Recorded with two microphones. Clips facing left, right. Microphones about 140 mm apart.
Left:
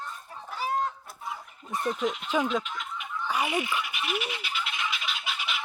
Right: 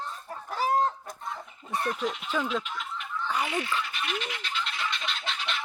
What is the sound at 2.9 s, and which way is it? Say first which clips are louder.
Fowl: left 1 dB; 10° left (ahead or behind).